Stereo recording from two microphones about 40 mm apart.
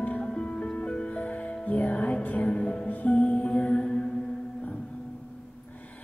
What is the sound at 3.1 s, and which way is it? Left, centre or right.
Music, left.